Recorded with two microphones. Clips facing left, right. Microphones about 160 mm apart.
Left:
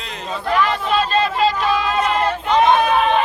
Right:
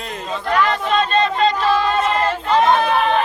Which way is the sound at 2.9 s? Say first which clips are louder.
Left 1 dB; 5° left (ahead or behind).